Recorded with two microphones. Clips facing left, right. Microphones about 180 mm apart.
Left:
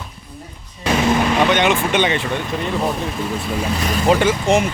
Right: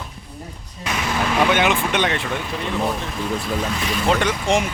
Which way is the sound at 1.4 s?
5° right (ahead or behind).